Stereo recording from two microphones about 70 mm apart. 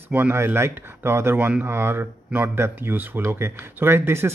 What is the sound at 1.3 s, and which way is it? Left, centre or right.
Speech, right.